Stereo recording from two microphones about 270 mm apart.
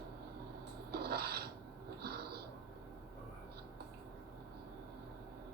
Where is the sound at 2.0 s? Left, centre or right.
Right.